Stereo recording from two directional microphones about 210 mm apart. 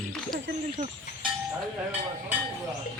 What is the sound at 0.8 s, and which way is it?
Speech, 35° right (ahead or behind).